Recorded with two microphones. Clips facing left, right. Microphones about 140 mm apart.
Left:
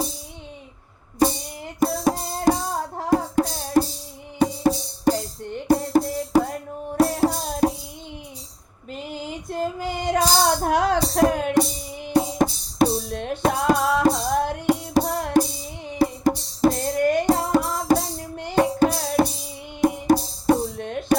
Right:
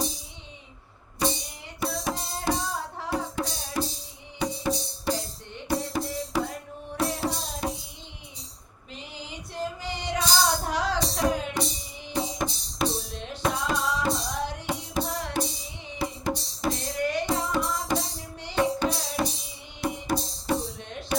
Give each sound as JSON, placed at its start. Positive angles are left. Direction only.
{"t": 1.2, "sound": "music", "side_deg": 45}
{"t": 8.9, "sound": "female singing", "side_deg": 45}
{"t": 14.9, "sound": "music", "side_deg": 45}